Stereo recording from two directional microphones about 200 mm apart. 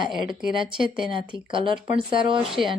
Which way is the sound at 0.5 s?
25° right (ahead or behind).